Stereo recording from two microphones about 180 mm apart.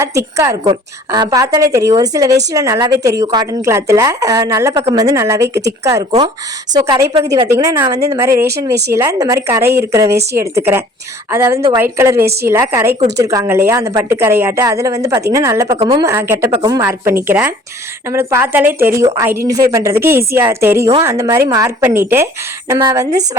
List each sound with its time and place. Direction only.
0.0 s a woman's voice: 15° right (ahead or behind)
15.8 s a woman's voice: 30° right (ahead or behind)
16.0 s a woman's voice: 15° right (ahead or behind)